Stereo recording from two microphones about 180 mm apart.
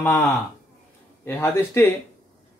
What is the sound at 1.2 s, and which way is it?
Speech, 10° left (ahead or behind).